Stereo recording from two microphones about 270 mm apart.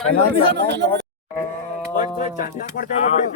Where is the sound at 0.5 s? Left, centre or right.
Right.